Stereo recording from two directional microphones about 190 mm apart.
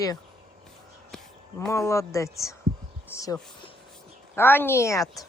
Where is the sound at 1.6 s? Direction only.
15° left (ahead or behind).